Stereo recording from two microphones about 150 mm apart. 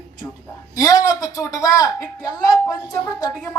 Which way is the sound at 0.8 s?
25° left (ahead or behind).